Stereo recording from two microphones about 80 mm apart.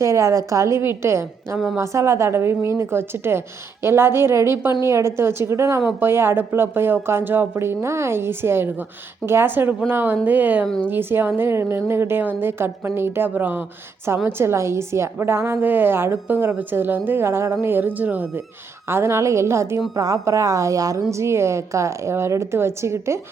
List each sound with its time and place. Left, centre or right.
0.0 s a woman's voice: right
18.9 s a woman's voice: right